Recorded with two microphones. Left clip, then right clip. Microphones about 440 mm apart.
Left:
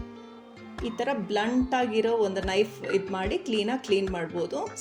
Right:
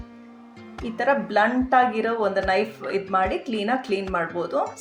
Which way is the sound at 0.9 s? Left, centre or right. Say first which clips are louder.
Right 8 dB; left.